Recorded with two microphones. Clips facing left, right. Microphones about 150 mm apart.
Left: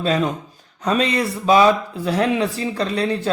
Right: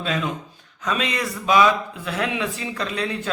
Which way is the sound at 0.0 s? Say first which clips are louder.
Left 6 dB; 35° left (ahead or behind).